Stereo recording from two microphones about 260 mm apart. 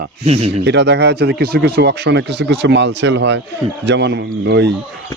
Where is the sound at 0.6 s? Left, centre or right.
Right.